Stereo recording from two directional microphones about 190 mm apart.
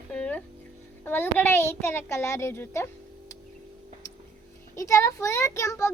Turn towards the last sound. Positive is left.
turn(degrees=15)  # may be behind; listen again after turning